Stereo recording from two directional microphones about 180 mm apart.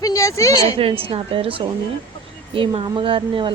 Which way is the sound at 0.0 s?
20° left (ahead or behind).